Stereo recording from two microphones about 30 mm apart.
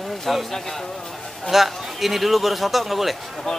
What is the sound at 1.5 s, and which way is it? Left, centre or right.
A man's voice, centre.